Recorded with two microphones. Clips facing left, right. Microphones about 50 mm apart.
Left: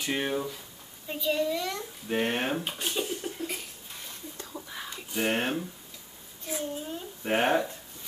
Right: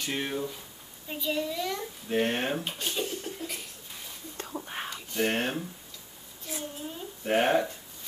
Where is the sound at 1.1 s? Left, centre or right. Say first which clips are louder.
Left 3 dB; centre.